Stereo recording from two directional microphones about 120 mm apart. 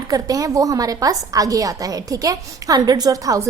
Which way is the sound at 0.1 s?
30° right (ahead or behind).